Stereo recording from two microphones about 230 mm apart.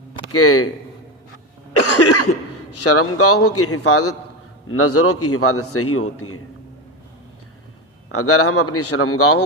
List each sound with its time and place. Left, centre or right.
0.3 s a man's voice: left
1.7 s cough: left
2.7 s a man's voice: left
8.1 s a man's voice: left